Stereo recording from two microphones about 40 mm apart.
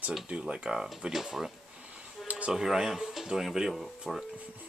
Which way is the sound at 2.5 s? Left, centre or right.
Centre.